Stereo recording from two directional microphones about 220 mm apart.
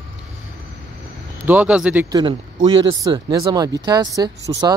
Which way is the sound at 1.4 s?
5° right (ahead or behind).